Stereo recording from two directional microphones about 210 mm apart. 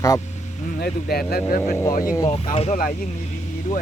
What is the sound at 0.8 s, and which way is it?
Speech, 45° left (ahead or behind).